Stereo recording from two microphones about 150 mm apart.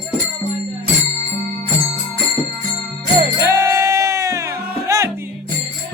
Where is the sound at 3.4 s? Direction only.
20° right (ahead or behind).